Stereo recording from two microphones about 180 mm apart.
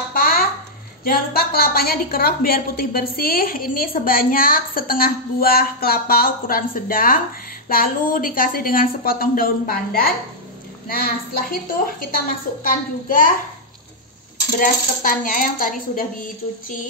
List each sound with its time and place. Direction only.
0.1 s a sound: 55° left (ahead or behind)
1.0 s a woman's voice: 55° left (ahead or behind)
14.6 s a woman's voice: 50° left (ahead or behind)